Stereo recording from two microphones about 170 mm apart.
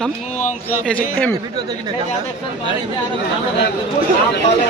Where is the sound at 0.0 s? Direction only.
10° left (ahead or behind).